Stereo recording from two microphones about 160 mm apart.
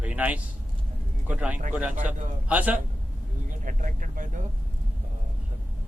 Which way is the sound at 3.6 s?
55° right (ahead or behind).